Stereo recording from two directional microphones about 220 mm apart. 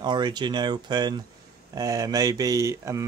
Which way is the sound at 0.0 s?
20° right (ahead or behind).